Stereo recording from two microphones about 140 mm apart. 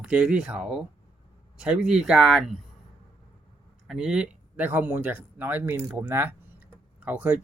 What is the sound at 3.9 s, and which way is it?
Speech, 5° right (ahead or behind).